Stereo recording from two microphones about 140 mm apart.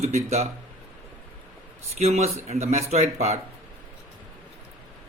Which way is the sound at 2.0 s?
50° right (ahead or behind).